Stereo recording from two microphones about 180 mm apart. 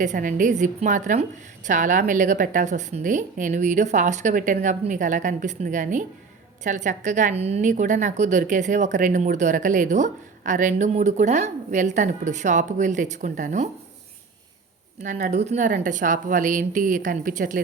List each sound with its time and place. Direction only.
0.0 s a woman's voice: 45° right (ahead or behind)
15.0 s a woman's voice: 45° right (ahead or behind)